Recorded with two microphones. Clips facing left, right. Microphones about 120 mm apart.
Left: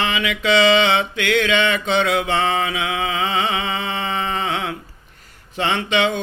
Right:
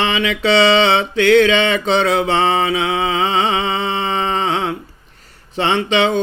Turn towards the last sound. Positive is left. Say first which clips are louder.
# right 4 dB
turn(degrees=-30)  # may be behind; listen again after turning